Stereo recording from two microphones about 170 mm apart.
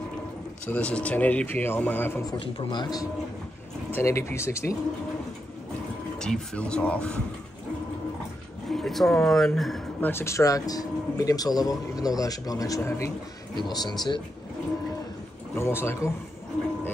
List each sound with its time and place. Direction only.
0.7 s speech: 5° left (ahead or behind)
2.2 s speech: 30° left (ahead or behind)
6.1 s speech: 5° left (ahead or behind)
8.6 s speech: centre (ahead or behind); by 14.2 s 25° left (ahead or behind)
15.5 s speech: 15° left (ahead or behind)